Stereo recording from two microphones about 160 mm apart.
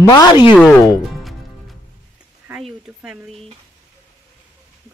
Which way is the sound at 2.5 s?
10° right (ahead or behind).